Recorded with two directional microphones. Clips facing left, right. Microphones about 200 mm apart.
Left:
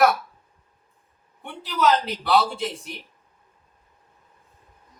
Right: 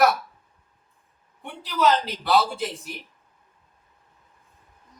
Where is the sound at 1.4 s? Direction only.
Centre (ahead or behind).